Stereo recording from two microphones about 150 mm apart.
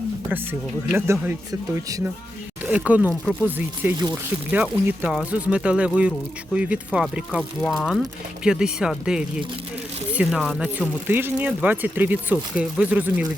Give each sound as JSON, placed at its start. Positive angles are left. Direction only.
{"t": 0.9, "sound": "speech", "side_deg": -15}